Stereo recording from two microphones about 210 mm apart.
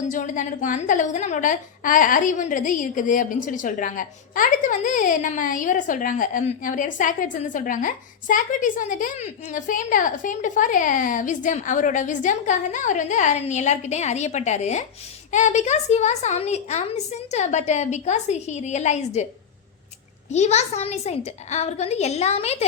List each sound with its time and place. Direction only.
0.1 s a woman's voice: 40° left (ahead or behind)
20.3 s a woman's voice: 30° left (ahead or behind)